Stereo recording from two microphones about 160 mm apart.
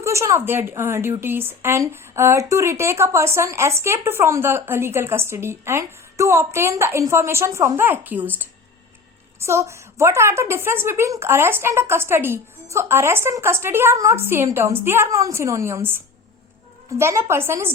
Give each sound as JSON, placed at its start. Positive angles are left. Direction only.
{"t": 0.0, "sound": "a woman's voice", "side_deg": -20}
{"t": 17.0, "sound": "a woman's voice", "side_deg": -15}